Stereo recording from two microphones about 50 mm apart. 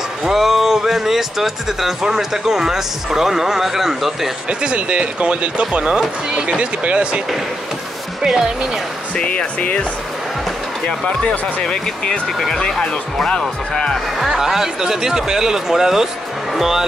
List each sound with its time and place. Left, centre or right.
0.2 s speech: centre
4.5 s speech: right
8.2 s speech: centre
9.1 s speech: left
10.9 s speech: centre
14.1 s speech: centre